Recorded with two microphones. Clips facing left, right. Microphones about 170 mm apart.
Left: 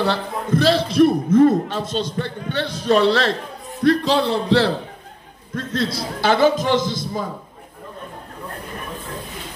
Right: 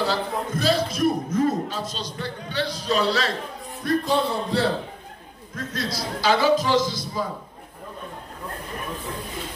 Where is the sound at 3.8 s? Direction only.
85° left.